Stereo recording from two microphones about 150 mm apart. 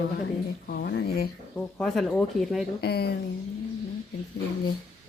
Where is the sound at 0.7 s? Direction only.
90° left.